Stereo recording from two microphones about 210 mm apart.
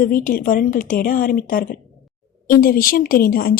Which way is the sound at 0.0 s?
40° left (ahead or behind).